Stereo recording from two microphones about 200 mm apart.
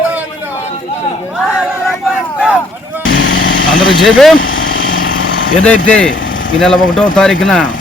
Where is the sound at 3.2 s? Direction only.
75° left (ahead or behind).